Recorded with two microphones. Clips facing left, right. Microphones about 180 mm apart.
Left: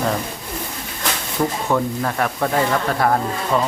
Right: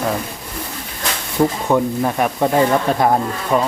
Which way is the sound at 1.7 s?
20° right (ahead or behind).